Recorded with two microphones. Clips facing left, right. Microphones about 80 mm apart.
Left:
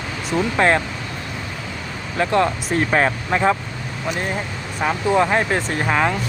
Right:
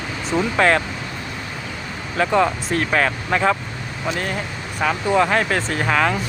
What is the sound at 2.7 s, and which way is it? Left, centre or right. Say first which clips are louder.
Speech: left 1 dB; left.